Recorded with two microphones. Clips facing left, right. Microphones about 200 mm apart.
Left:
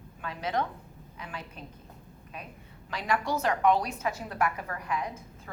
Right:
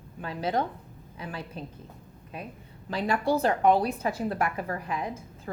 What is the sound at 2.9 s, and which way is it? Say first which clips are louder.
A woman's voice: right 4 dB; 30° right (ahead or behind).